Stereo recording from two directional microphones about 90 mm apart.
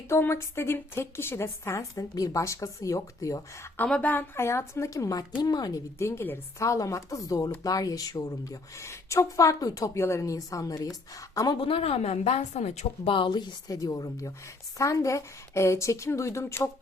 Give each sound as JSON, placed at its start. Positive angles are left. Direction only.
{"t": 0.1, "sound": "speech", "side_deg": 30}
{"t": 3.8, "sound": "a woman's voice", "side_deg": 10}
{"t": 4.1, "sound": "a woman's voice", "side_deg": 25}
{"t": 6.0, "sound": "speech", "side_deg": 30}
{"t": 11.5, "sound": "speech", "side_deg": 90}
{"t": 13.1, "sound": "a woman's voice", "side_deg": 65}